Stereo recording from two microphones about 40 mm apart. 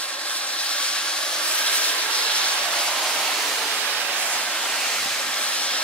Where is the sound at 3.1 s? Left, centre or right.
Left.